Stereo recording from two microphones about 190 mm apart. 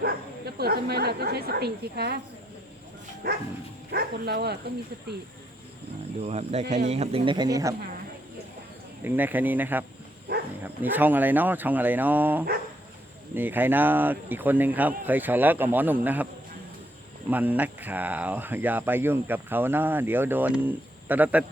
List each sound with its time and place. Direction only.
0.0 s speech: 55° right (ahead or behind)
3.2 s speech: 60° right (ahead or behind)
6.2 s speech: 35° right (ahead or behind); by 7.8 s 20° right (ahead or behind)
9.0 s speech: 10° right (ahead or behind)
17.2 s speech: 10° right (ahead or behind)